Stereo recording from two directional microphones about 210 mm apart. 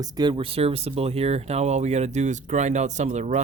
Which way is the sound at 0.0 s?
20° right (ahead or behind).